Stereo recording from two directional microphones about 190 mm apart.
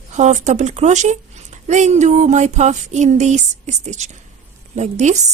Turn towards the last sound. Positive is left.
turn(degrees=-35)  # may be behind; listen again after turning